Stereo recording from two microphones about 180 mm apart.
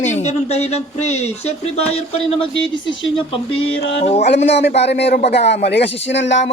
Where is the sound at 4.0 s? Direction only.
35° left (ahead or behind).